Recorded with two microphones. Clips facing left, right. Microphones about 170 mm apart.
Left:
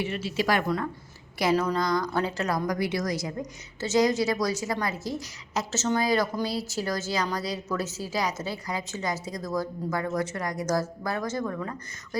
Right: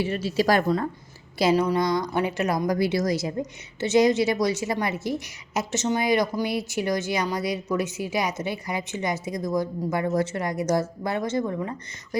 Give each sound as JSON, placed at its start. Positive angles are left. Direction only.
{"t": 0.0, "sound": "a woman's voice", "side_deg": -40}
{"t": 1.4, "sound": "a woman's voice", "side_deg": -25}